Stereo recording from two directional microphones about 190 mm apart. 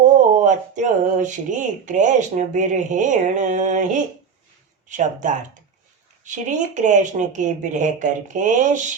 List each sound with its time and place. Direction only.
0.3 s speech: 40° right (ahead or behind)